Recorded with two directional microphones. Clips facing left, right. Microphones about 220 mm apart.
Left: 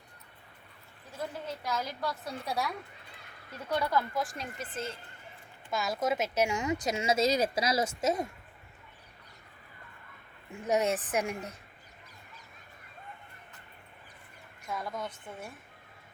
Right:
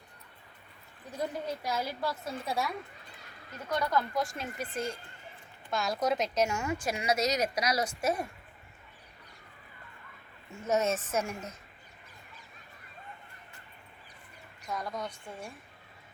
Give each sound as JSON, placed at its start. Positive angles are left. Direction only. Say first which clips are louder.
{"t": 1.1, "sound": "a woman's voice", "louder": "right 3 dB", "side_deg": -15}
{"t": 3.8, "sound": "a woman's voice", "louder": "even", "side_deg": 5}
{"t": 4.4, "sound": "speech", "louder": "right 3 dB", "side_deg": -10}
{"t": 5.7, "sound": "speech", "louder": "right 1 dB", "side_deg": 0}
{"t": 10.5, "sound": "a woman's voice", "louder": "even", "side_deg": 15}
{"t": 14.6, "sound": "a woman's voice", "louder": "even", "side_deg": 5}